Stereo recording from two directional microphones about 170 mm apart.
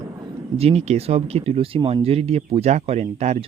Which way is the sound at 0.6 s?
40° right (ahead or behind).